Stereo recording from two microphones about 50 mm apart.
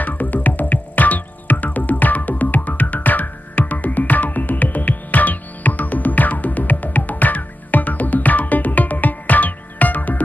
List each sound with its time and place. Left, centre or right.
0.0 s music: left